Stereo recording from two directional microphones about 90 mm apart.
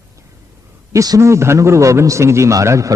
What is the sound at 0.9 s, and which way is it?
A man's voice, 40° right (ahead or behind).